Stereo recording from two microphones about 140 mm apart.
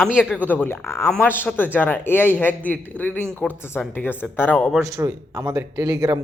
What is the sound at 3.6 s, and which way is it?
Speech, 15° left (ahead or behind).